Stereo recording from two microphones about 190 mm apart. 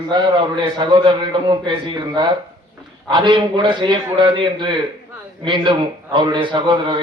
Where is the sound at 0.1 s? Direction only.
25° right (ahead or behind).